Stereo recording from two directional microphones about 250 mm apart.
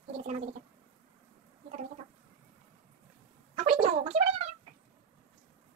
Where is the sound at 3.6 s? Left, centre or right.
Right.